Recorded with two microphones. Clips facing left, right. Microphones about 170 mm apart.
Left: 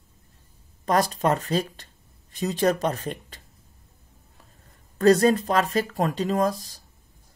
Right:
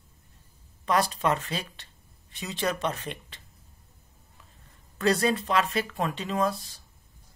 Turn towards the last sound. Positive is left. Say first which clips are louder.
# left 4 dB
turn(degrees=40)  # may be behind; listen again after turning